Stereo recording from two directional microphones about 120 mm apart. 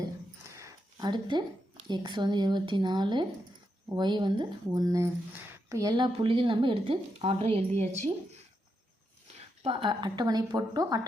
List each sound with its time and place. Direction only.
0.5 s a sound: 30° right (ahead or behind)
1.9 s speech: 40° right (ahead or behind)
6.1 s a woman's voice: 45° right (ahead or behind); by 8.1 s 70° right (ahead or behind)
9.8 s speech: 35° right (ahead or behind)